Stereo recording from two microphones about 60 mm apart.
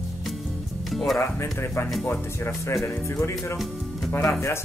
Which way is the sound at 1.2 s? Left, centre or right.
Left.